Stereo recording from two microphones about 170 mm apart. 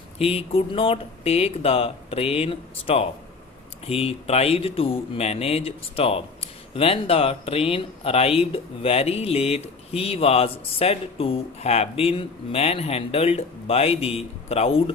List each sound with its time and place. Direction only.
0.2 s speech: 35° left (ahead or behind)